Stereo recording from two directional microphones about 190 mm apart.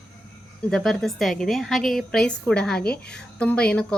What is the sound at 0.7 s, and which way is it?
A woman's voice, centre (ahead or behind).